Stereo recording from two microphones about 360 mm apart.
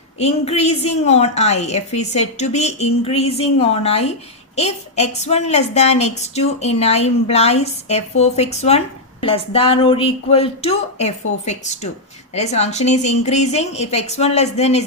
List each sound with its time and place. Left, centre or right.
0.2 s a woman's voice: centre
12.3 s a woman's voice: centre